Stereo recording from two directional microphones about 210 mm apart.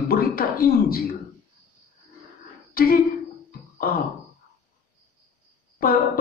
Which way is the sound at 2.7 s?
45° left (ahead or behind).